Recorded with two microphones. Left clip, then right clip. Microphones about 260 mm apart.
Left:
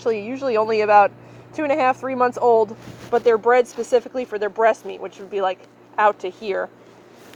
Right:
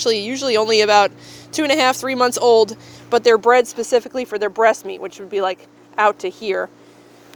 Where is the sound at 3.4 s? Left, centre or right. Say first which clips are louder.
Right 3 dB; right.